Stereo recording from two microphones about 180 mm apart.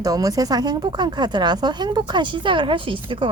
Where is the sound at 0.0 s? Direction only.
20° right (ahead or behind).